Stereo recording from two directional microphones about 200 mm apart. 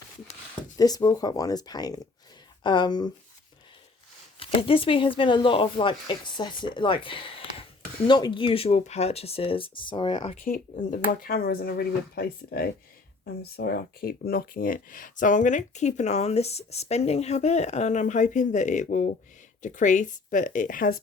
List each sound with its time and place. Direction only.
0.8 s speech: 20° left (ahead or behind)
4.4 s speech: 25° left (ahead or behind)
10.4 s speech: 40° left (ahead or behind)